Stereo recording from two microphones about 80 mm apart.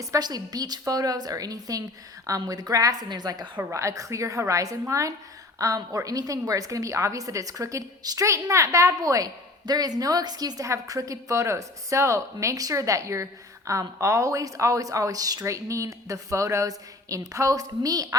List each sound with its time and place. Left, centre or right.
0.0 s a woman's voice: right
3.6 s a woman's voice: right